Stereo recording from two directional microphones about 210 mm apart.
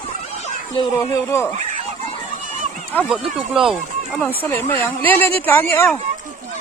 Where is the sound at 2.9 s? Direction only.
10° left (ahead or behind).